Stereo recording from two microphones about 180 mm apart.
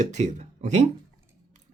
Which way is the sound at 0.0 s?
40° right (ahead or behind).